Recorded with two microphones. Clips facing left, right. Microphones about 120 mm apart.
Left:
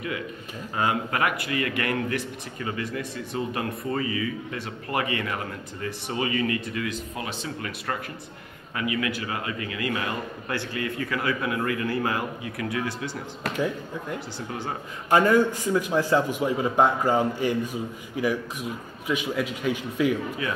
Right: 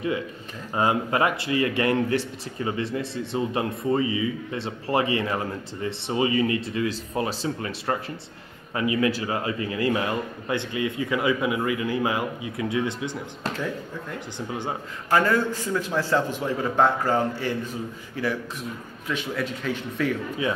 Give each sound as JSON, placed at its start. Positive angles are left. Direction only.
{"t": 0.7, "sound": "a man's voice", "side_deg": -25}
{"t": 14.5, "sound": "a man's voice", "side_deg": -15}
{"t": 15.0, "sound": "a man's voice", "side_deg": 20}